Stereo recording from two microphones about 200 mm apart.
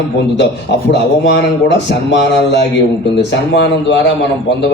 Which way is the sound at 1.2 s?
60° left (ahead or behind).